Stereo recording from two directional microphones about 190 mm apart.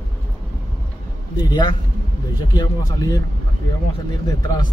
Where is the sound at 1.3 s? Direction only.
20° left (ahead or behind).